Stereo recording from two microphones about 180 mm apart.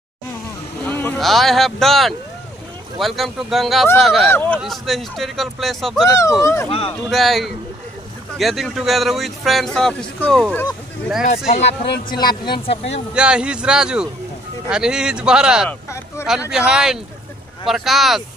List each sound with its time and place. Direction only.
0.8 s vehicle: 10° left (ahead or behind)
1.2 s a man's voice: centre (ahead or behind)
4.3 s a man's voice: 10° left (ahead or behind)
6.4 s speech: 15° left (ahead or behind)
7.1 s a man's voice: centre (ahead or behind)
11.2 s speech: 40° left (ahead or behind)
12.1 s speech: 60° left (ahead or behind)
13.1 s a man's voice: 5° right (ahead or behind)